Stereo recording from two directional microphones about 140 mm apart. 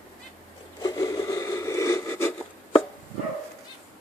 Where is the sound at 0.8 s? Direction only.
20° left (ahead or behind).